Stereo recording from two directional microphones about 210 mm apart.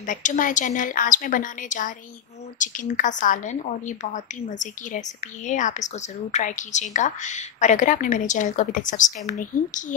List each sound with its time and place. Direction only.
0.0 s a woman's voice: 40° left (ahead or behind)